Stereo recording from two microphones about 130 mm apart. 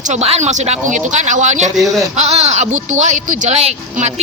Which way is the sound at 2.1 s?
60° right (ahead or behind).